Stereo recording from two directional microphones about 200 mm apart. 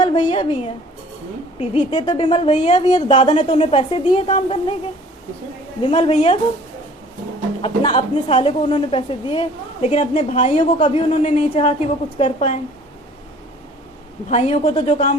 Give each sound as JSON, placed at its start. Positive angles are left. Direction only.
{"t": 0.0, "sound": "a woman's voice", "side_deg": 25}
{"t": 1.9, "sound": "a woman's voice", "side_deg": 20}
{"t": 2.8, "sound": "a woman's voice", "side_deg": 20}
{"t": 5.8, "sound": "a woman's voice", "side_deg": 30}
{"t": 7.6, "sound": "a woman's voice", "side_deg": 25}
{"t": 14.3, "sound": "a woman's voice", "side_deg": 30}